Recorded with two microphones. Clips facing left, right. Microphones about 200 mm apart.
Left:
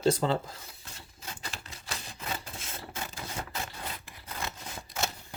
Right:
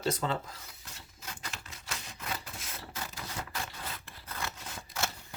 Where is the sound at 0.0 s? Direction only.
30° left (ahead or behind).